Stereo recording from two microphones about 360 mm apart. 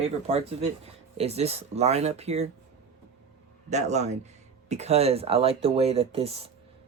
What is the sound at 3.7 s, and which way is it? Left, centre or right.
Speech, centre.